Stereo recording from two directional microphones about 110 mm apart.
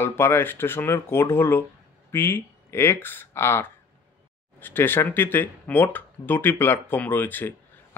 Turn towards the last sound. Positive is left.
turn(degrees=15)  # may be behind; listen again after turning